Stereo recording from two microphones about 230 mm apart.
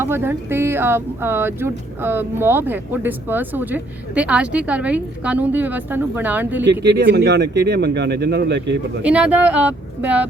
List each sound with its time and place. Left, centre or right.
0.0 s speech: centre
6.7 s speech: right
9.0 s speech: centre